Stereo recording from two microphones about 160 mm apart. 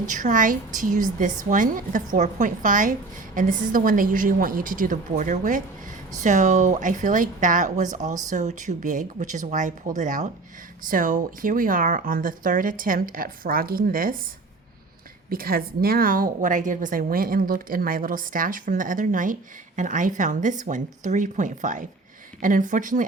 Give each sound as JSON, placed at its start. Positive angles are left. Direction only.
{"t": 0.0, "sound": "a woman's voice", "side_deg": -55}
{"t": 15.3, "sound": "a woman's voice", "side_deg": -65}